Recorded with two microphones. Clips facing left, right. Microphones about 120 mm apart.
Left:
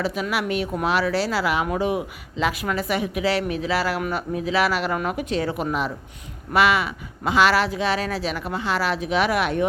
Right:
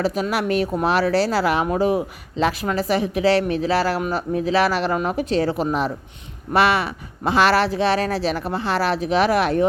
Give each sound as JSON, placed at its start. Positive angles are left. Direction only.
{"t": 0.0, "sound": "speech", "side_deg": -40}